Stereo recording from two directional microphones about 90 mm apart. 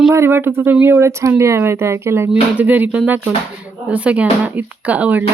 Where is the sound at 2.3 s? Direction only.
20° right (ahead or behind).